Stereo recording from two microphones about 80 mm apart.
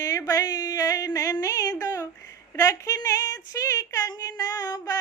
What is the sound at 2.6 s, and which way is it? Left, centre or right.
Child singing, left.